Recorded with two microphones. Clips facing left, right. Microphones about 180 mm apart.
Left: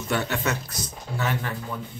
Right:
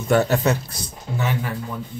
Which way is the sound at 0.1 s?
40° right (ahead or behind).